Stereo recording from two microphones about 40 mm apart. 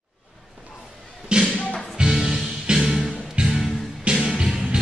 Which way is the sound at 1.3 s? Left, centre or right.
Right.